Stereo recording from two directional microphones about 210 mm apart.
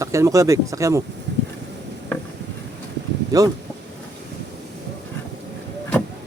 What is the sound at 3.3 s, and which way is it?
Speech, 15° right (ahead or behind).